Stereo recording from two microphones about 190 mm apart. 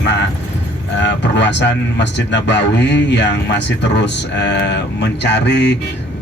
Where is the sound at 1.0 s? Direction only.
70° left (ahead or behind).